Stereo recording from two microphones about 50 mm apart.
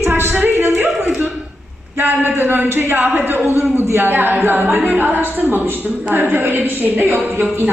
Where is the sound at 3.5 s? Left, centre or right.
Right.